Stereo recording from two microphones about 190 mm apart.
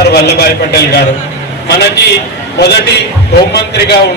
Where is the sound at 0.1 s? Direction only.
55° left (ahead or behind).